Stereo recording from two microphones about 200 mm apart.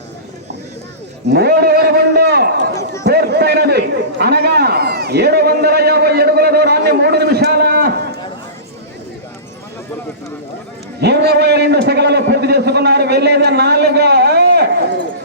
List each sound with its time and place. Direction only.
1.3 s a sound: 50° right (ahead or behind)
3.0 s a man's voice: 55° right (ahead or behind)
11.0 s a man's voice: 55° right (ahead or behind)